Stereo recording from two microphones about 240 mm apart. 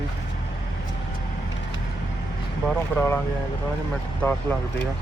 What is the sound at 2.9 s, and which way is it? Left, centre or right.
Speech, centre.